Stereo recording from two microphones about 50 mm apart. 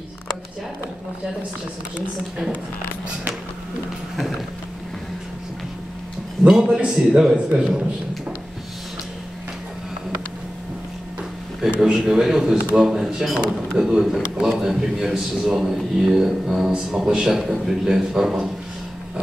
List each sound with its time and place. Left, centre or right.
6.4 s a man's voice: centre
11.8 s a man's voice: centre
14.6 s a man's voice: centre